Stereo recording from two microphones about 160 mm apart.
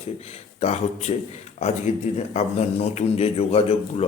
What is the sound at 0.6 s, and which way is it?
Speech, 40° left (ahead or behind).